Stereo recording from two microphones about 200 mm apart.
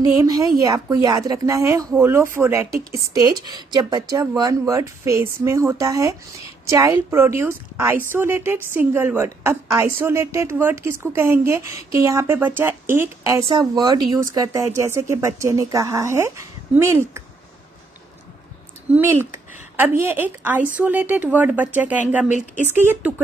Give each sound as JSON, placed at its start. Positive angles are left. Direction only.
{"t": 0.2, "sound": "speech", "side_deg": -15}
{"t": 18.9, "sound": "a woman's voice", "side_deg": -10}